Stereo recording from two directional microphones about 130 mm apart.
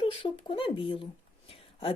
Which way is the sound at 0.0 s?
45° left (ahead or behind).